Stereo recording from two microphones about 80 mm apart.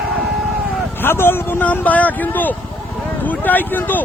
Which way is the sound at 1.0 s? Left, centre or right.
Left.